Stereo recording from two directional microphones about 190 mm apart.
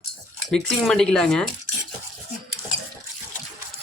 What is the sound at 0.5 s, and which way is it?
Speech, centre (ahead or behind).